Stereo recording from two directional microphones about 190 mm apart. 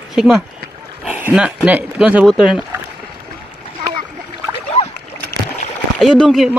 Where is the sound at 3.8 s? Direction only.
15° right (ahead or behind).